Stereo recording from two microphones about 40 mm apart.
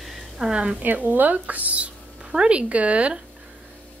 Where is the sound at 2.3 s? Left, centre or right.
Right.